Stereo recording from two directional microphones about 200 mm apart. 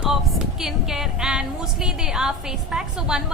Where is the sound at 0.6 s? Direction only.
Centre (ahead or behind).